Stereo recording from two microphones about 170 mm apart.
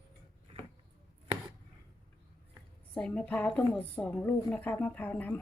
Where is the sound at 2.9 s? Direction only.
10° left (ahead or behind).